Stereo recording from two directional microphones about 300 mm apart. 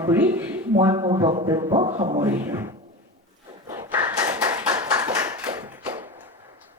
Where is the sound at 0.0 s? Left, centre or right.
Centre.